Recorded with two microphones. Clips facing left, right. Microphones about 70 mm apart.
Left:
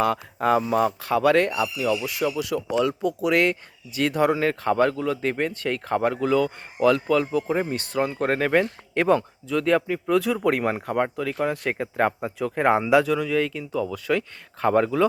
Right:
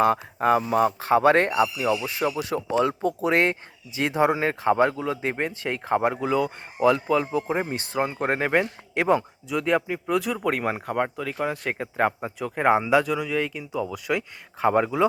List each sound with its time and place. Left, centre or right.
0.0 s speech: right